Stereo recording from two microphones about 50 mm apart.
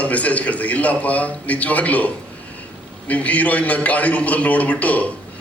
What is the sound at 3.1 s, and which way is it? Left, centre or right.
A man's voice, left.